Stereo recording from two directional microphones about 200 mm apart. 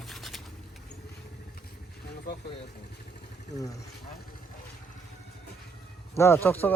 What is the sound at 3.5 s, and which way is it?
Speech, 15° left (ahead or behind).